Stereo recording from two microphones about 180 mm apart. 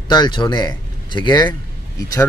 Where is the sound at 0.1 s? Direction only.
25° left (ahead or behind).